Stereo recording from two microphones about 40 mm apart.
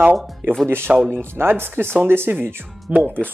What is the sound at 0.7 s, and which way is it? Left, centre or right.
Speech, right.